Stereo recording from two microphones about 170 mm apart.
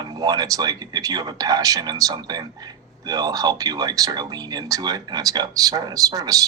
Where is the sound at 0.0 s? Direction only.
20° right (ahead or behind).